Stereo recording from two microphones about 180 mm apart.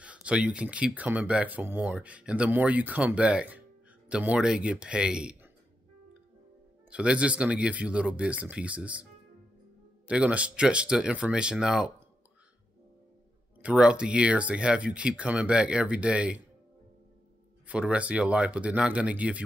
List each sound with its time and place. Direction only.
0.0 s speech: 5° right (ahead or behind)
6.9 s speech: 5° right (ahead or behind)
10.0 s speech: 5° right (ahead or behind)
13.6 s speech: 5° right (ahead or behind)
17.6 s speech: 5° right (ahead or behind)